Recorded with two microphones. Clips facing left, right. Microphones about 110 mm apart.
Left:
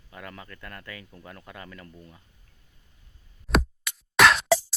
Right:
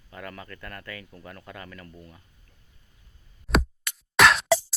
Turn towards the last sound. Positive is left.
turn(degrees=0)  # may be behind; listen again after turning